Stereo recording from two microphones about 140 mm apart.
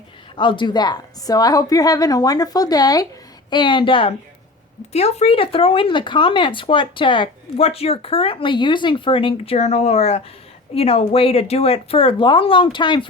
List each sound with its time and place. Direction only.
0.3 s a woman's voice: 35° left (ahead or behind)
4.9 s speech: 50° left (ahead or behind); by 13.1 s 35° left (ahead or behind)